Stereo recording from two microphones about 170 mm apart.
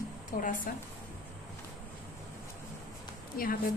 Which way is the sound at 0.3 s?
50° left (ahead or behind).